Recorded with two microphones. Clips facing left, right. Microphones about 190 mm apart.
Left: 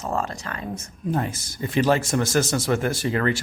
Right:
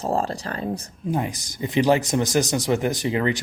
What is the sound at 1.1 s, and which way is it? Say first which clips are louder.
Speech: even; 15° right (ahead or behind).